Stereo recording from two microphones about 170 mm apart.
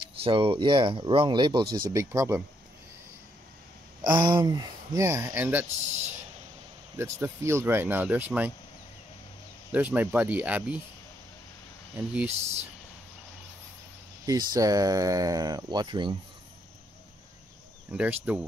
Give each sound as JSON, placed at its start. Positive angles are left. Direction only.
{"t": 0.2, "sound": "speech", "side_deg": -30}
{"t": 4.0, "sound": "speech", "side_deg": -25}
{"t": 7.0, "sound": "speech", "side_deg": -15}
{"t": 9.7, "sound": "speech", "side_deg": -10}
{"t": 12.0, "sound": "speech", "side_deg": -5}
{"t": 12.3, "sound": "speech", "side_deg": -40}
{"t": 14.2, "sound": "speech", "side_deg": -20}
{"t": 17.9, "sound": "speech", "side_deg": -10}